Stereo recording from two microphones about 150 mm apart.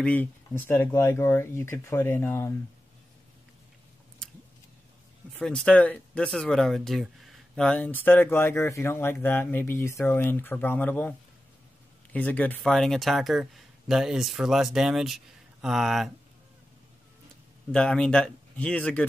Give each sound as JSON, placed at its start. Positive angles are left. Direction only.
{"t": 0.0, "sound": "speech", "side_deg": 10}
{"t": 5.3, "sound": "speech", "side_deg": 5}
{"t": 17.6, "sound": "speech", "side_deg": 5}